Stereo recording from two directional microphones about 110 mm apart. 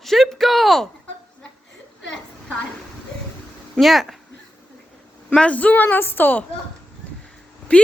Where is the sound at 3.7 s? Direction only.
Centre (ahead or behind).